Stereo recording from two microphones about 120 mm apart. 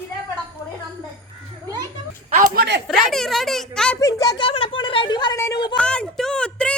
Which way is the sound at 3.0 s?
Centre (ahead or behind).